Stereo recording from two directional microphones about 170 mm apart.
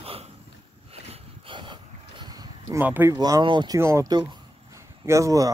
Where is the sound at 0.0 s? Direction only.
35° right (ahead or behind).